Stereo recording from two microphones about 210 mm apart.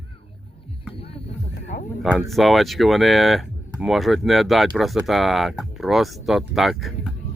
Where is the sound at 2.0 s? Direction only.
5° right (ahead or behind).